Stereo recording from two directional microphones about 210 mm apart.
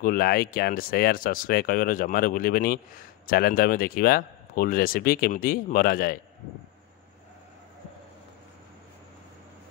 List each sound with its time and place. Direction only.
0.0 s a man's voice: 45° left (ahead or behind)